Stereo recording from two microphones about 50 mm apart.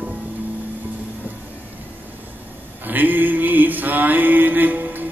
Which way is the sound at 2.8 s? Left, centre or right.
Right.